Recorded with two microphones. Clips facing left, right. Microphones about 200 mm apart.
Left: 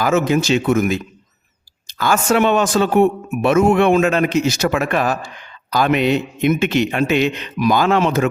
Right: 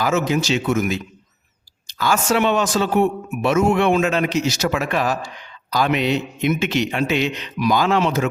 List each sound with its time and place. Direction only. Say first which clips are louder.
0.0 s speech: left 3 dB; 55° left (ahead or behind)